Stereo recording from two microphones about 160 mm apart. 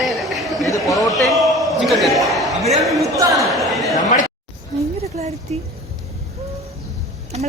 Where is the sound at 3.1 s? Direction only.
20° right (ahead or behind).